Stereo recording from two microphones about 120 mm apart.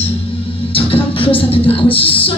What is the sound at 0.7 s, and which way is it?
Music, 50° left (ahead or behind).